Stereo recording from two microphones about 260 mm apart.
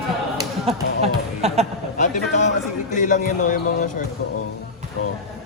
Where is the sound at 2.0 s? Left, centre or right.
Left.